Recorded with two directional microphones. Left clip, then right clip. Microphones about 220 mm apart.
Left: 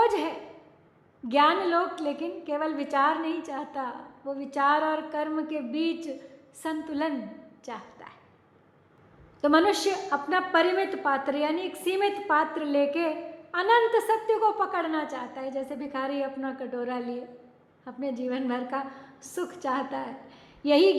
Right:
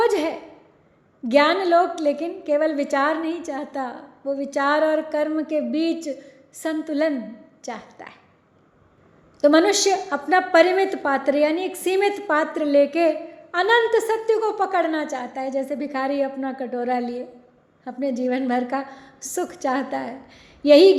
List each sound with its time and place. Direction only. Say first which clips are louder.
0.0 s a sound: right 4 dB; 20° right (ahead or behind)
1.3 s a woman's voice: right 6 dB; 20° right (ahead or behind)
9.4 s a woman's voice: right 6 dB; 20° right (ahead or behind)